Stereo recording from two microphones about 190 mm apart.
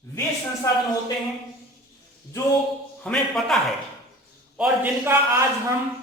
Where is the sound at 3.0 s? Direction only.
5° left (ahead or behind).